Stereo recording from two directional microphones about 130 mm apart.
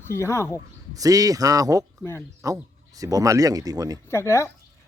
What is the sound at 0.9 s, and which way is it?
Speech, 25° right (ahead or behind).